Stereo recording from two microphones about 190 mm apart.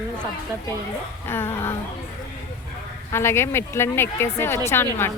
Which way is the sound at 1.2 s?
10° left (ahead or behind).